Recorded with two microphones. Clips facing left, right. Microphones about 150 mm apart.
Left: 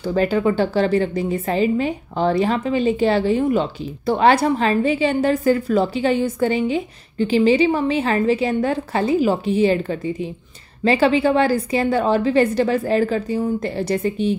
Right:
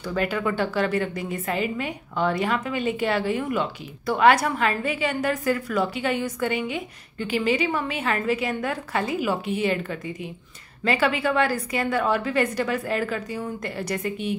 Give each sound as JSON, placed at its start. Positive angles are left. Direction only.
{"t": 0.0, "sound": "a woman's voice", "side_deg": 30}